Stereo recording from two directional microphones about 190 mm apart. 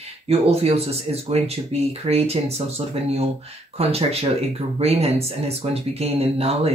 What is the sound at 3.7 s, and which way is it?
Speech, 30° right (ahead or behind).